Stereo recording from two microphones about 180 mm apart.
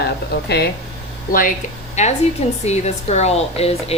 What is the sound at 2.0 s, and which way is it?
Speech, 40° left (ahead or behind).